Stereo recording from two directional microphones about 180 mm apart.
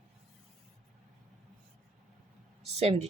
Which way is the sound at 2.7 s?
35° right (ahead or behind).